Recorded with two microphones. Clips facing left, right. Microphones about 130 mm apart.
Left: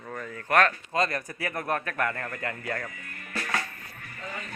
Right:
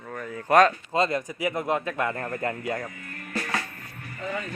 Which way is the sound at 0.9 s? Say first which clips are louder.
Right 3 dB; 25° right (ahead or behind).